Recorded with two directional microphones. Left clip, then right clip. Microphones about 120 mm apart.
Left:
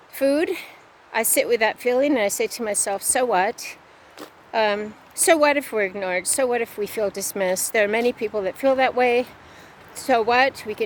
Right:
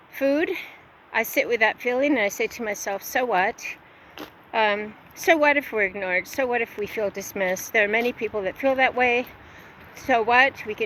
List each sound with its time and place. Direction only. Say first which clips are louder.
0.1 s a woman's voice: left 2 dB; 45° left (ahead or behind)